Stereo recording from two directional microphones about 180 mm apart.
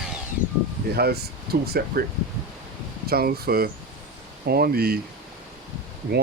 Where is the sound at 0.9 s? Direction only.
60° right (ahead or behind).